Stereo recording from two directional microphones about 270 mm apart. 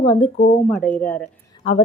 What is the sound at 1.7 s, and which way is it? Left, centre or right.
Speech, left.